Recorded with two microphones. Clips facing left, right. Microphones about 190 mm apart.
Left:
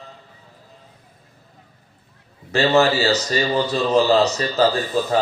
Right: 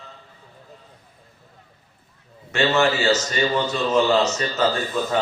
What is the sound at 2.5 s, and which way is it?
Speech, 35° left (ahead or behind).